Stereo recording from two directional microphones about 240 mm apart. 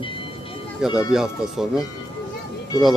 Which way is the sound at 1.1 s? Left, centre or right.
Centre.